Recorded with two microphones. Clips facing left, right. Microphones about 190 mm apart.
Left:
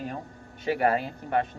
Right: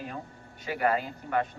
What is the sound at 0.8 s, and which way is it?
Speech, 30° left (ahead or behind).